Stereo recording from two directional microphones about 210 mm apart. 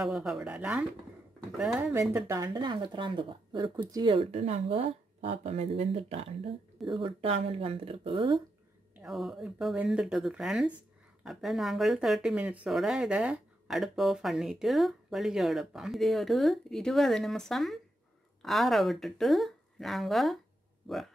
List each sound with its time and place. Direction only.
0.0 s speech: centre (ahead or behind); by 8.4 s 25° right (ahead or behind)
8.9 s speech: centre (ahead or behind)